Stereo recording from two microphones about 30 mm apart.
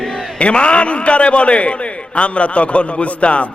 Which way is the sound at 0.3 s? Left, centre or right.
Left.